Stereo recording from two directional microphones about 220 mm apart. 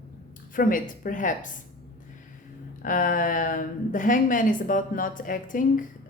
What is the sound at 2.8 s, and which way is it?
A woman's voice, 40° left (ahead or behind).